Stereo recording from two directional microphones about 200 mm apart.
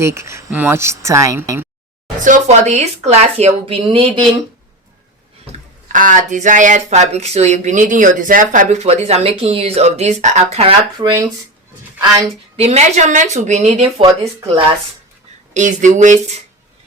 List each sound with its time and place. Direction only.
0.0 s speech: 15° right (ahead or behind)
2.2 s speech: 35° right (ahead or behind)
5.5 s speech: 40° right (ahead or behind); by 11.2 s 25° right (ahead or behind)
12.5 s speech: 35° right (ahead or behind)
15.5 s speech: 40° right (ahead or behind)